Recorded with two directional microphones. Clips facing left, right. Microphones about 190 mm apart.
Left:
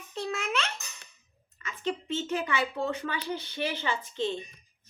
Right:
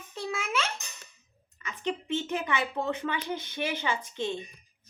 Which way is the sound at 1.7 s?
15° right (ahead or behind).